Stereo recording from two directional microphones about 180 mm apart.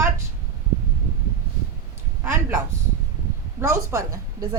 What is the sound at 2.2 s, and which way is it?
A woman's voice, 15° right (ahead or behind).